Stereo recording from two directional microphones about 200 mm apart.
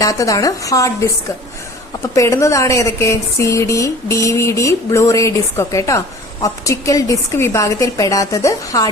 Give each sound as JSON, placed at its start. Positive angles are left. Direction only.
{"t": 0.0, "sound": "speech", "side_deg": 15}
{"t": 2.1, "sound": "speech", "side_deg": 15}